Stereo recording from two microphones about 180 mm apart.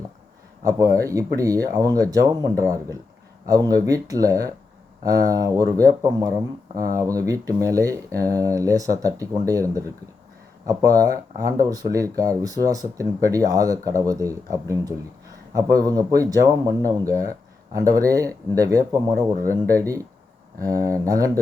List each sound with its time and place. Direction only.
0.6 s speech: 20° right (ahead or behind)